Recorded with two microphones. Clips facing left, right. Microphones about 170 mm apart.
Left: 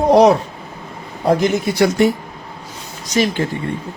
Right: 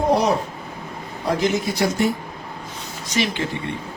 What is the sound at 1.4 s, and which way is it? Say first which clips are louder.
Speech: left 5 dB; 55° left (ahead or behind).